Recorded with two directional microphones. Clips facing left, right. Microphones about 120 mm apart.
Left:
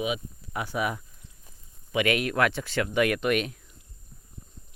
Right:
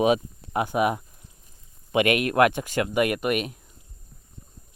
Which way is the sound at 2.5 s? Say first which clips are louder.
Right 3 dB; 15° right (ahead or behind).